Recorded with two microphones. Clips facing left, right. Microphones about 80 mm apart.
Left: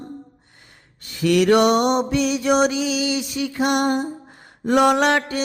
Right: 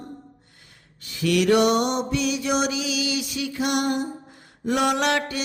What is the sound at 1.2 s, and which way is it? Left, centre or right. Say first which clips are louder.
Mantra: left 3 dB; left.